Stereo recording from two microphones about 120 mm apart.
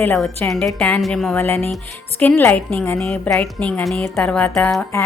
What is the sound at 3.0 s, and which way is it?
Speech, 5° left (ahead or behind).